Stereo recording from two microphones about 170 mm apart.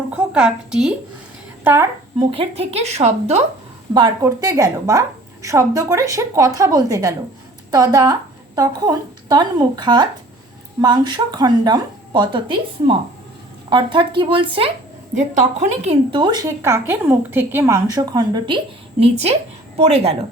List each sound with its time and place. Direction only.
0.1 s a woman's voice: 5° right (ahead or behind)
1.6 s a woman's voice: 15° right (ahead or behind)
2.1 s a woman's voice: 30° right (ahead or behind)
3.9 s a woman's voice: 25° right (ahead or behind)
15.1 s a woman's voice: 45° right (ahead or behind)
16.2 s a woman's voice: 25° right (ahead or behind)